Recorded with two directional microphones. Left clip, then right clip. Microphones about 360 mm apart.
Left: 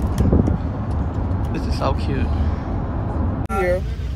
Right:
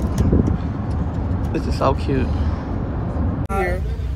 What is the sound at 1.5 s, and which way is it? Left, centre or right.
Speech, centre.